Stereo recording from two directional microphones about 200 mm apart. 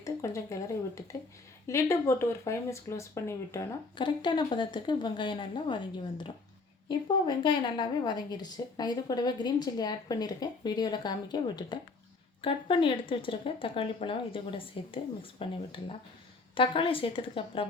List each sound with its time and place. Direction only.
0.0 s a woman's voice: 15° left (ahead or behind)